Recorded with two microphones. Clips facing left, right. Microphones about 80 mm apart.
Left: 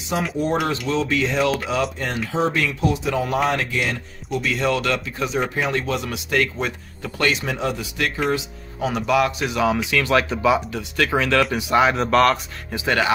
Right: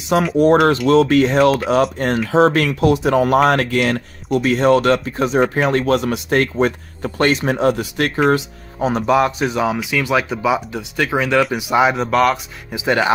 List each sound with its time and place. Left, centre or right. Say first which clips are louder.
0.4 s speech: right 10 dB; right
2.3 s speech: right 8 dB; right
8.7 s speech: right 4 dB; right; by 12.8 s centre
12.8 s speech: right 4 dB; centre